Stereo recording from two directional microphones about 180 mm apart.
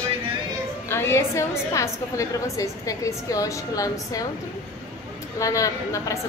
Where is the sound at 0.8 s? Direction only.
15° left (ahead or behind).